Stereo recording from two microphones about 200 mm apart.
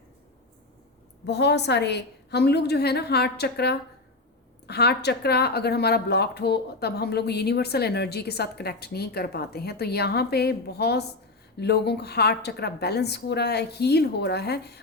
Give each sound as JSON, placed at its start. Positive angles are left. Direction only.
{"t": 1.2, "sound": "a woman's voice", "side_deg": 60}